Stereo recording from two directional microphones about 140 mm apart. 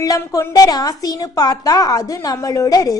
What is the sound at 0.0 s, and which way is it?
A woman's voice, 25° left (ahead or behind).